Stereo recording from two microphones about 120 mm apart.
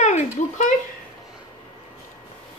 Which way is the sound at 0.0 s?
85° left.